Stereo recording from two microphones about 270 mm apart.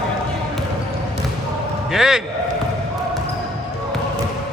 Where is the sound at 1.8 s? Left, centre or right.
Centre.